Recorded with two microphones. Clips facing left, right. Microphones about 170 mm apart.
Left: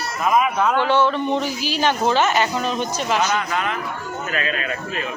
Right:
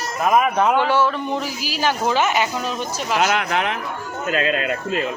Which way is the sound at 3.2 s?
75° right (ahead or behind).